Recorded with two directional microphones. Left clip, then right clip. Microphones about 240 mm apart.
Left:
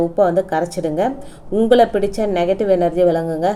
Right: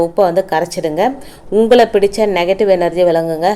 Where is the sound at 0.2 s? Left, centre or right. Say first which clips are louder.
Right 2 dB; centre.